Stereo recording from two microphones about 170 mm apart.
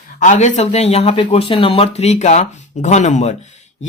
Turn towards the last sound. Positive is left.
turn(degrees=45)  # may be behind; listen again after turning